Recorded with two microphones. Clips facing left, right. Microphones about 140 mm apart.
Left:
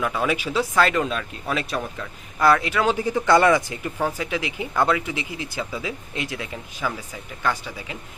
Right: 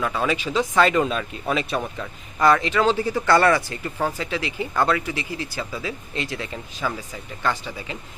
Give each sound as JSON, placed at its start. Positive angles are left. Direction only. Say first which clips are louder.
{"t": 0.0, "sound": "speech", "louder": "even", "side_deg": 10}